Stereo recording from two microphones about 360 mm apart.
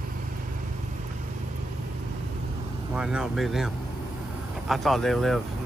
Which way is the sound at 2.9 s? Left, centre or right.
Centre.